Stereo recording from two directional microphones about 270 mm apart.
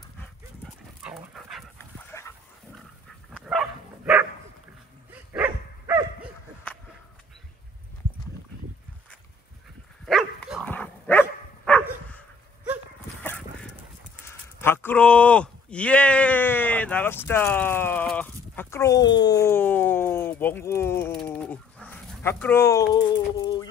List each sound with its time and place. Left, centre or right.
1.0 s dog: centre
2.1 s dog: centre
3.3 s dog: centre
10.0 s dog: centre
13.2 s a sound: centre